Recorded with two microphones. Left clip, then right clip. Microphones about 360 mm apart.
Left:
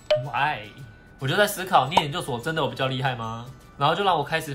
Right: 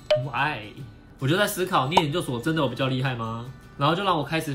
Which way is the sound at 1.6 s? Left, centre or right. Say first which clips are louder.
Left 2 dB; centre.